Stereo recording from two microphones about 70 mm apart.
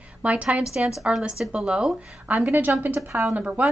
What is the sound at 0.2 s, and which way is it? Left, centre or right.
A woman's voice, centre.